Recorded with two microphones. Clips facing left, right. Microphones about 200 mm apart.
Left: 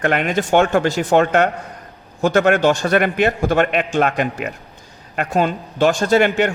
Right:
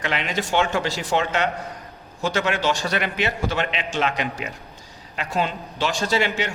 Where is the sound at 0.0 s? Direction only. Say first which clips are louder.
Left 8 dB; 55° left (ahead or behind).